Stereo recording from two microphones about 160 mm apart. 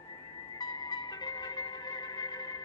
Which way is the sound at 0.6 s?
25° left (ahead or behind).